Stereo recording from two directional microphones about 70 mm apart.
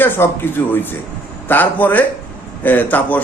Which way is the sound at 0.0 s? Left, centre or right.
Left.